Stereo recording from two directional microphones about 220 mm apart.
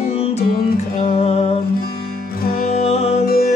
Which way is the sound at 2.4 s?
40° left (ahead or behind).